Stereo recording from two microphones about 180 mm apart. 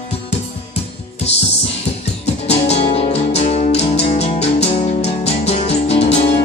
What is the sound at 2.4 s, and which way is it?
Music, 35° left (ahead or behind).